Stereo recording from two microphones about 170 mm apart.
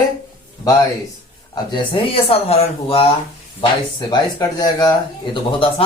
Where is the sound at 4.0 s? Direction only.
25° left (ahead or behind).